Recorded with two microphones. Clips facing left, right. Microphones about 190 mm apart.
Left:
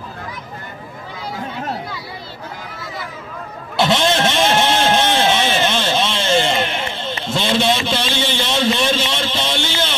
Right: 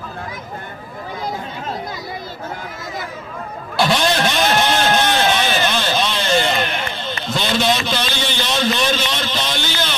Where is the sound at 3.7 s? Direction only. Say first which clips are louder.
Left 1 dB; 25° left (ahead or behind).